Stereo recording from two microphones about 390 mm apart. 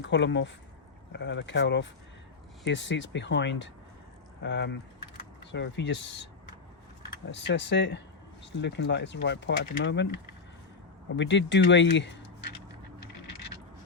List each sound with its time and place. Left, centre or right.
0.1 s speech: left
7.3 s speech: left
11.2 s speech: left